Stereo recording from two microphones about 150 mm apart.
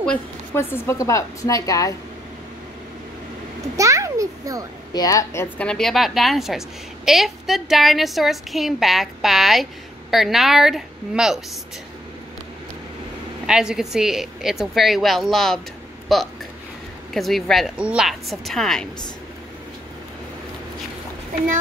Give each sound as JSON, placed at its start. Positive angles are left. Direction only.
{"t": 0.6, "sound": "a woman's voice", "side_deg": 15}
{"t": 3.7, "sound": "a sound", "side_deg": -20}
{"t": 4.9, "sound": "a woman's voice", "side_deg": 25}
{"t": 5.7, "sound": "a woman's voice", "side_deg": 0}
{"t": 13.5, "sound": "a woman's voice", "side_deg": -5}